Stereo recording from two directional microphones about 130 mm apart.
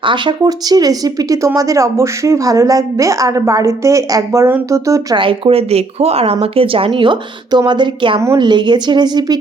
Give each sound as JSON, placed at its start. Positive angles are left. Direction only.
{"t": 0.0, "sound": "speech", "side_deg": -35}
{"t": 5.1, "sound": "speech", "side_deg": -45}